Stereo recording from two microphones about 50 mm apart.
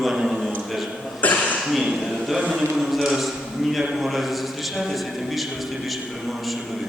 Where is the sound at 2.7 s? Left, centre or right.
Centre.